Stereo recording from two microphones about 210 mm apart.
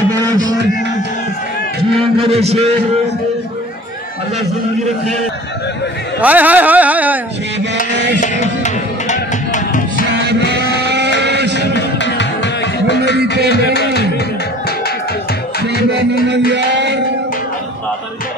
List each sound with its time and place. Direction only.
0.1 s a sound: 15° right (ahead or behind)
2.2 s a man's voice: 30° right (ahead or behind)
6.2 s speech: 5° right (ahead or behind)
7.7 s music: 55° right (ahead or behind)
8.2 s music: 35° left (ahead or behind)
10.5 s a sound: 55° right (ahead or behind)
11.7 s music: 55° left (ahead or behind)
16.3 s music: 55° right (ahead or behind)